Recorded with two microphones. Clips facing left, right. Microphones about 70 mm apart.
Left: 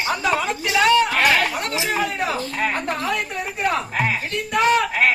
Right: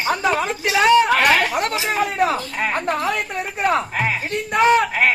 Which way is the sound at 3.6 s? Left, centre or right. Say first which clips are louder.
Right 3 dB; right.